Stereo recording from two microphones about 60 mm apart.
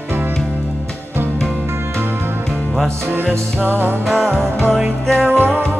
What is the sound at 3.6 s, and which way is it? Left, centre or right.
Music, right.